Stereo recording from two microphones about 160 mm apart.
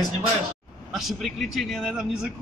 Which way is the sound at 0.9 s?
Centre (ahead or behind).